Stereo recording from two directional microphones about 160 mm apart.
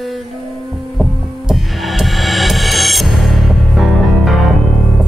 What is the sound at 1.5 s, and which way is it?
Music, centre (ahead or behind).